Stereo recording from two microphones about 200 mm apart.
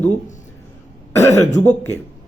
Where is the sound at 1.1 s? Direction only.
15° left (ahead or behind).